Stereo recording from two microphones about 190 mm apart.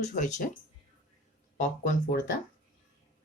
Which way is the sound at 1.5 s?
45° left (ahead or behind).